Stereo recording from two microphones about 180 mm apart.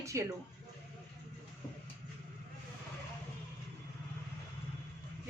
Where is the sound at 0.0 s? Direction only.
15° right (ahead or behind).